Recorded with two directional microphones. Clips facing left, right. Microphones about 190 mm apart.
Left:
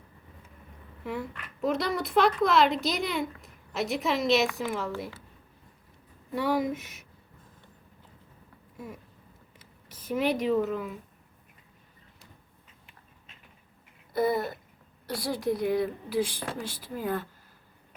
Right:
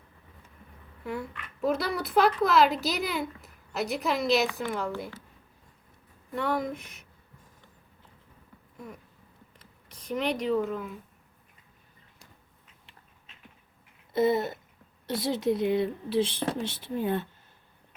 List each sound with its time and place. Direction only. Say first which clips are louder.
1.0 s a woman's voice: even; centre (ahead or behind)
6.3 s a woman's voice: left 2 dB; 5° left (ahead or behind)
9.6 s speech: left 1 dB; 5° left (ahead or behind)
14.1 s speech: right 2 dB; 25° right (ahead or behind)